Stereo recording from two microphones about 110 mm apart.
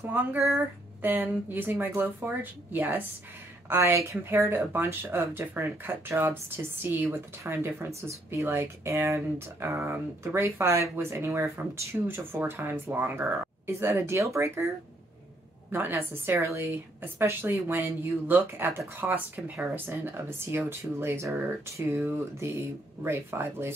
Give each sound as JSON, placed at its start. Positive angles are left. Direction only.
{"t": 0.0, "sound": "a woman's voice", "side_deg": -20}
{"t": 15.7, "sound": "a woman's voice", "side_deg": -20}